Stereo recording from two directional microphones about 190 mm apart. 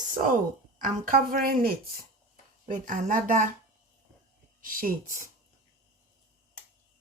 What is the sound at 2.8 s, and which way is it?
Speech, 45° right (ahead or behind).